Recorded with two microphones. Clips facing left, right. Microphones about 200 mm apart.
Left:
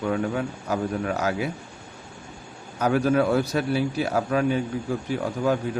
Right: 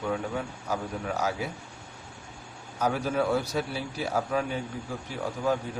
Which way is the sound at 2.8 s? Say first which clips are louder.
Left 6 dB; 70° left (ahead or behind).